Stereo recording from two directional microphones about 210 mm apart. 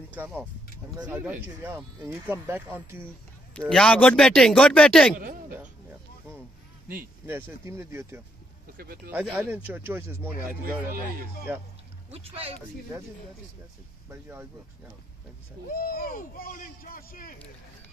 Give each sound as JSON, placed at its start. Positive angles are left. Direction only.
{"t": 1.0, "sound": "a man's voice", "side_deg": -5}
{"t": 2.2, "sound": "speech", "side_deg": -10}
{"t": 3.5, "sound": "a man's voice", "side_deg": 5}
{"t": 5.1, "sound": "speech", "side_deg": -40}
{"t": 7.2, "sound": "speech", "side_deg": -10}
{"t": 8.7, "sound": "speech", "side_deg": -45}
{"t": 9.1, "sound": "speech", "side_deg": -5}
{"t": 11.5, "sound": "speech", "side_deg": -10}
{"t": 12.1, "sound": "speech", "side_deg": -30}
{"t": 14.0, "sound": "speech", "side_deg": -10}
{"t": 15.7, "sound": "a man's voice", "side_deg": 45}